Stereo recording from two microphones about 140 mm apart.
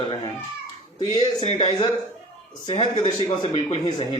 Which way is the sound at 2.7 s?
40° left (ahead or behind).